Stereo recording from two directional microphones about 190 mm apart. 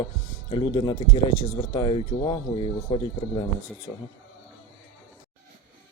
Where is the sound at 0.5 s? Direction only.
25° left (ahead or behind).